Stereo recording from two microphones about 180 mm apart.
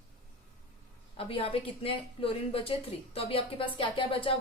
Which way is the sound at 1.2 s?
30° left (ahead or behind).